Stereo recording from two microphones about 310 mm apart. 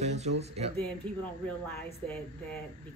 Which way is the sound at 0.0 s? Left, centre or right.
Right.